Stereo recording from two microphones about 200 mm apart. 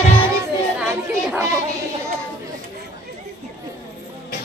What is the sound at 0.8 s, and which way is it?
Chatter, 5° right (ahead or behind).